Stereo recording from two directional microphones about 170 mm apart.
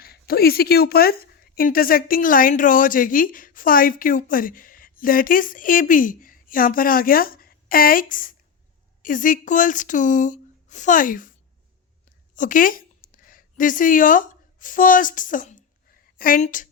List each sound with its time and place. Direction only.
0.0 s a woman's voice: 65° left (ahead or behind)